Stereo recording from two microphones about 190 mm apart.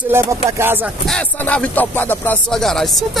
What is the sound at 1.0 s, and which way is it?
Speech, 5° left (ahead or behind).